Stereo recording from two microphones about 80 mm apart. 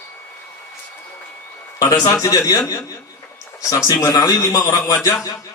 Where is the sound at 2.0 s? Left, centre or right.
Left.